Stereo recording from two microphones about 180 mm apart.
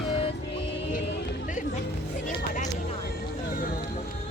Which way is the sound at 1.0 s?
45° left (ahead or behind).